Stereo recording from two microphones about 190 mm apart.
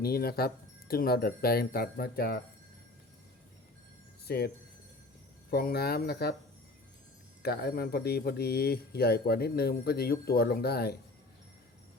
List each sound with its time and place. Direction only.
0.0 s speech: 55° left (ahead or behind)
4.3 s speech: 55° left (ahead or behind)
7.4 s speech: 55° left (ahead or behind)